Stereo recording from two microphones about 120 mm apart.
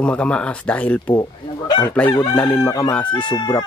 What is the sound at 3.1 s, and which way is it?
Speech, 40° left (ahead or behind).